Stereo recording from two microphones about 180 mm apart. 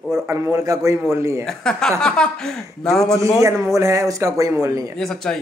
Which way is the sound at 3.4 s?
15° right (ahead or behind).